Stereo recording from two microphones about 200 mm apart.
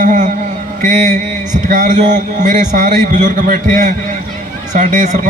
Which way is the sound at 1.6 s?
40° right (ahead or behind).